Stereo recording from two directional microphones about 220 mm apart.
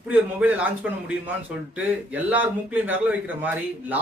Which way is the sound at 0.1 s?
5° right (ahead or behind).